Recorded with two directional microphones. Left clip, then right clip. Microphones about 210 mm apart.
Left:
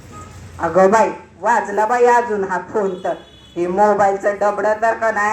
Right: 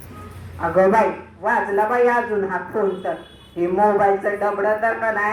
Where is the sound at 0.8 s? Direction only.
45° left (ahead or behind).